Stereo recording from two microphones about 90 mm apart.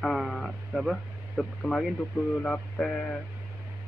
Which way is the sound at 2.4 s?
15° left (ahead or behind).